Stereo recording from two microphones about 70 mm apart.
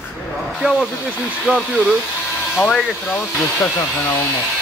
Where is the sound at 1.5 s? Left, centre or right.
Right.